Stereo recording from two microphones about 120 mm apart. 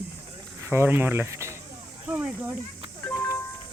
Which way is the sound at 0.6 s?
20° right (ahead or behind).